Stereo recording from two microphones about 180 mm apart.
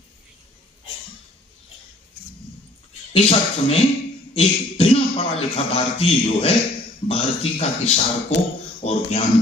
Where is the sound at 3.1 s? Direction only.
35° left (ahead or behind).